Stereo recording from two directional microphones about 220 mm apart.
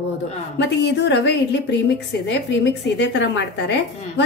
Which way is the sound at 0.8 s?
50° left (ahead or behind).